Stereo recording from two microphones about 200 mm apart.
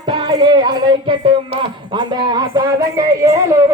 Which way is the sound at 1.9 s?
20° right (ahead or behind).